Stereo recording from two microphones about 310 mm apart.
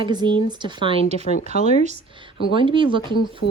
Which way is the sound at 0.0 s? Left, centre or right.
Centre.